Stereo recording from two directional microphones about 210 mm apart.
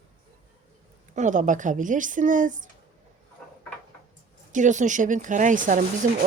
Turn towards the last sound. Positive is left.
turn(degrees=-35)  # may be behind; listen again after turning